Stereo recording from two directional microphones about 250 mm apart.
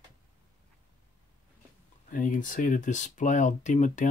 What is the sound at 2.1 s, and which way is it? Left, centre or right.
Speech, left.